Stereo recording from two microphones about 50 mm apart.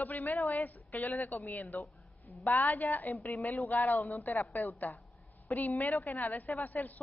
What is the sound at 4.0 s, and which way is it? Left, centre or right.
Speech, left.